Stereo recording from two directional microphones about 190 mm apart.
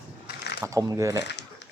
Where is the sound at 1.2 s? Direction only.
65° left (ahead or behind).